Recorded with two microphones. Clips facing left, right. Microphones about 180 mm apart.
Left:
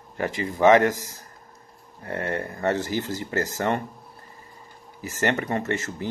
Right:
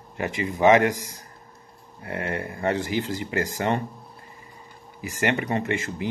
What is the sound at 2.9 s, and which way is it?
Speech, 15° right (ahead or behind).